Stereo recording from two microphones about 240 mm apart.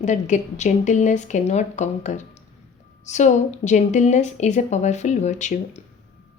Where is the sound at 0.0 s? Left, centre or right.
Left.